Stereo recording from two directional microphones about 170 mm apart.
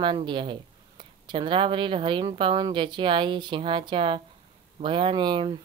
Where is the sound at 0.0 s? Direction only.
30° right (ahead or behind).